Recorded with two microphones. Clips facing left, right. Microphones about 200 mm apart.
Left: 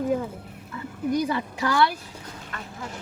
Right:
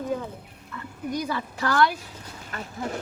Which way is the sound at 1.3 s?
15° left (ahead or behind).